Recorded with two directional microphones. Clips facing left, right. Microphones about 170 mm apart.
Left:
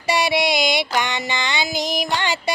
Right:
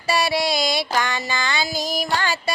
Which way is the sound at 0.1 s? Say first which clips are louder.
Left 2 dB; 20° left (ahead or behind).